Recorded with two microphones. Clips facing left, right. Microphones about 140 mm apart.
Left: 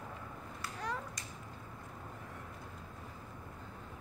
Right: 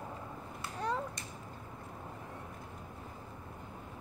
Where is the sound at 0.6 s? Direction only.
25° right (ahead or behind).